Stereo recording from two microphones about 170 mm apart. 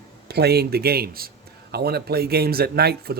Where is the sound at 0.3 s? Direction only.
70° right (ahead or behind).